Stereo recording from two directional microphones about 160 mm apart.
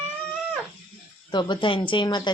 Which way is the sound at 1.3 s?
30° left (ahead or behind).